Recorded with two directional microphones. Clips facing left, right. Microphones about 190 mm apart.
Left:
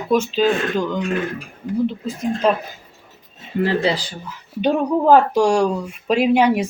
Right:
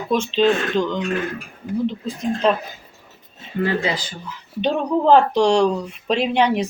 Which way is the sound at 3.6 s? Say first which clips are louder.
Left 3 dB; 30° left (ahead or behind).